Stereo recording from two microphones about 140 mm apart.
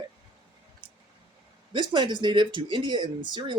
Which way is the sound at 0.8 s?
35° right (ahead or behind).